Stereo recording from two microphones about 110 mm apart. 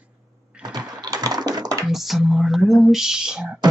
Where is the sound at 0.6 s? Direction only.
40° right (ahead or behind).